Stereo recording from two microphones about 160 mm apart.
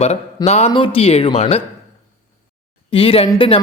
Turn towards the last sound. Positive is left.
turn(degrees=35)  # may be behind; listen again after turning